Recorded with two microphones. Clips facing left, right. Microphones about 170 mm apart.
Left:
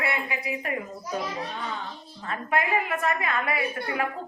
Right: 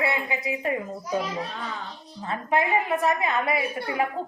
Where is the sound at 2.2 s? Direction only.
20° right (ahead or behind).